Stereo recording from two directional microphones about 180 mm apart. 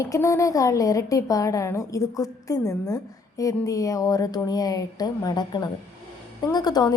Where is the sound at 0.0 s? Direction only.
15° left (ahead or behind).